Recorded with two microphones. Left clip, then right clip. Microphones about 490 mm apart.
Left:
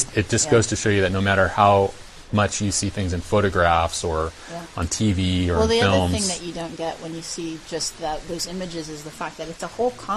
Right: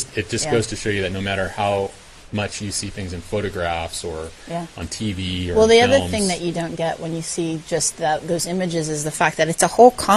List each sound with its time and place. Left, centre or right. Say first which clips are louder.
0.2 s speech: left 2 dB; left
5.0 s speech: left 2 dB; left
5.5 s a woman's voice: right 6 dB; right